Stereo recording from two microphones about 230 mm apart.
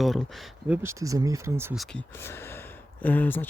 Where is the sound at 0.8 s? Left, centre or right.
Centre.